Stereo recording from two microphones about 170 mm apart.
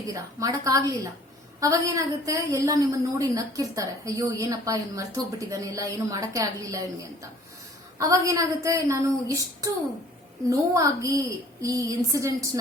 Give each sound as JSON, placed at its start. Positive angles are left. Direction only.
{"t": 0.1, "sound": "a woman's voice", "side_deg": -20}
{"t": 7.9, "sound": "a woman's voice", "side_deg": -20}
{"t": 10.4, "sound": "a woman's voice", "side_deg": -20}